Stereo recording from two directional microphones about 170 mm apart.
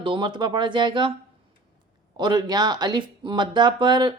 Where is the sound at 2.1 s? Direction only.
25° right (ahead or behind).